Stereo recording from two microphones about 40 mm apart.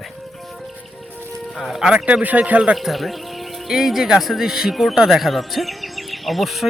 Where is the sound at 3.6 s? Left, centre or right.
Centre.